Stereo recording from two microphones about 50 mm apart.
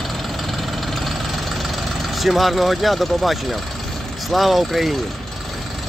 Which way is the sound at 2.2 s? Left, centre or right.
Centre.